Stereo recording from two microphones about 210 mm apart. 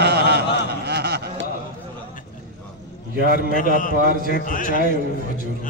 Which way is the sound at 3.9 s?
40° right (ahead or behind).